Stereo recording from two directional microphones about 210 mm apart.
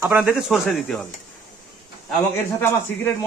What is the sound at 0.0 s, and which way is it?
A man's voice, 5° right (ahead or behind).